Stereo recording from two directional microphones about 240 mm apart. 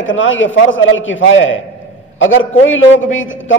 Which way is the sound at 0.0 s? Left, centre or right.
Left.